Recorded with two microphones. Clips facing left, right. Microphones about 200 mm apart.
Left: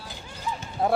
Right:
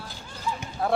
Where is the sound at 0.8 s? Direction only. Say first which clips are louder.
Left 1 dB; 20° left (ahead or behind).